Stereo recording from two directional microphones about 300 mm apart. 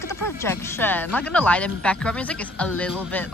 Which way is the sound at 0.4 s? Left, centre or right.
Centre.